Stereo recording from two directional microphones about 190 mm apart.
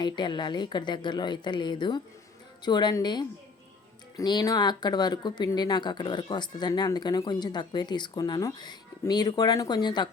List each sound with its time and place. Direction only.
0.0 s speech: 25° left (ahead or behind)